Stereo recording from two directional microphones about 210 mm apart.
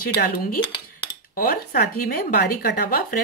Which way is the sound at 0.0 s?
45° left (ahead or behind).